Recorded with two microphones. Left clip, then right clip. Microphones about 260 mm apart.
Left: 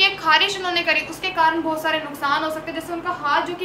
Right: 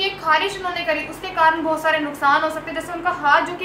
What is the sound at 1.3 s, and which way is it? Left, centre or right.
A woman's voice, centre.